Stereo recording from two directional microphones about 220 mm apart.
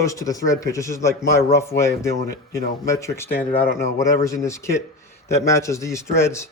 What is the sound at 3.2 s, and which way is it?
Speech, 45° left (ahead or behind).